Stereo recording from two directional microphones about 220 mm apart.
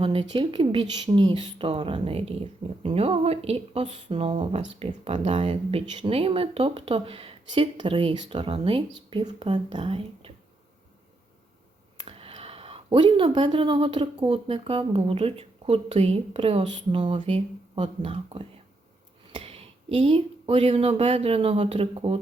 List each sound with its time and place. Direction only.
0.0 s speech: 25° right (ahead or behind)
11.9 s speech: 25° right (ahead or behind)